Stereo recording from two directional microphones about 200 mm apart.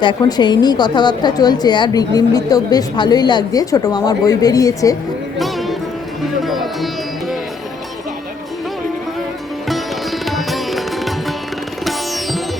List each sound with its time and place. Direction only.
0.0 s a woman's voice: 20° left (ahead or behind)
5.4 s music: centre (ahead or behind)
9.6 s sitar: centre (ahead or behind)
11.9 s music: centre (ahead or behind)